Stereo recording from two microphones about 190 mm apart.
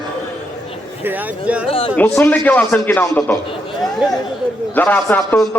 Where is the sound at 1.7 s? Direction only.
30° left (ahead or behind).